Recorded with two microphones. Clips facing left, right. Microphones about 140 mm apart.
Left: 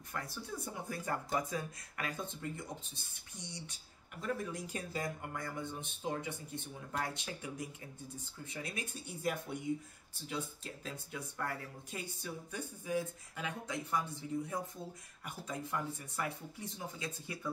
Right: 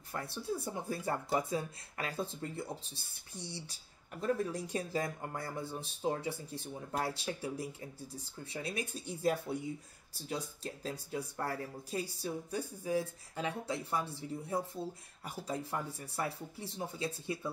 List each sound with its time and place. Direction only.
0.1 s speech: 30° right (ahead or behind)